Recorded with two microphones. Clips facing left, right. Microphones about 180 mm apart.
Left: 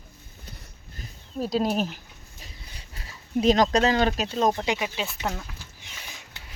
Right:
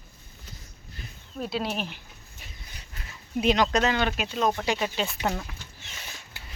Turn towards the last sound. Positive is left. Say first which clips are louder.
# right 2 dB
turn(degrees=0)  # may be behind; listen again after turning